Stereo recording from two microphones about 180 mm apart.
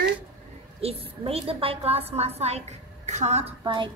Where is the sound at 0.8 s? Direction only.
35° right (ahead or behind).